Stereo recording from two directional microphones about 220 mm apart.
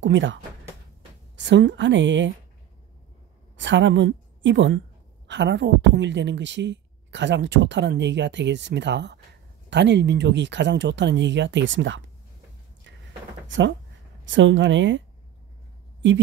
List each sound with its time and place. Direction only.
0.0 s a woman's voice: 55° right (ahead or behind)
3.5 s a woman's voice: 55° right (ahead or behind)
13.5 s a woman's voice: 55° right (ahead or behind)